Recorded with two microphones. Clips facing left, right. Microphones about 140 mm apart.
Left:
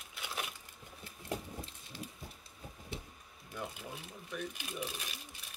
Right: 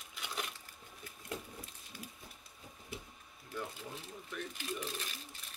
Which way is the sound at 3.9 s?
10° left (ahead or behind).